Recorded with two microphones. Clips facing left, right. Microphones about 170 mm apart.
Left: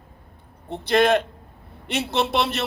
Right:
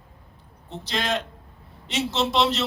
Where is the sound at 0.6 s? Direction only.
60° left (ahead or behind).